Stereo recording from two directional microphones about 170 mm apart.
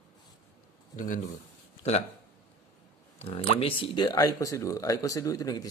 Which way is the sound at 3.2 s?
35° left (ahead or behind).